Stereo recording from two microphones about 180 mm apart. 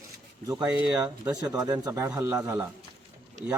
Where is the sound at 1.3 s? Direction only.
20° right (ahead or behind).